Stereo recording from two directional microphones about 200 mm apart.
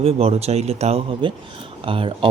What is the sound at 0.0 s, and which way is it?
Speech, 30° right (ahead or behind).